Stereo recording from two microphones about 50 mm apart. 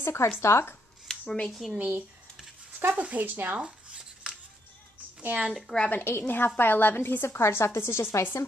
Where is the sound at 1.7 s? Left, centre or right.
Right.